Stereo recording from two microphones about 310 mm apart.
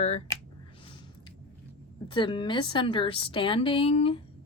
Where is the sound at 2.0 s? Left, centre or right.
Centre.